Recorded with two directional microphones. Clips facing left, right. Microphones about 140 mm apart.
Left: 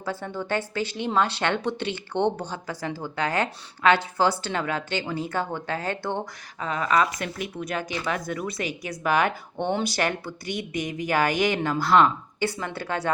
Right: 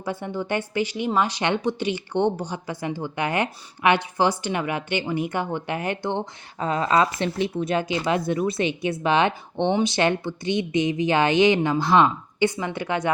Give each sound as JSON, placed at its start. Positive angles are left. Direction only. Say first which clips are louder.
{"t": 0.0, "sound": "a woman's voice", "louder": "right 2 dB", "side_deg": -15}
{"t": 6.6, "sound": "speech", "louder": "right 3 dB", "side_deg": -30}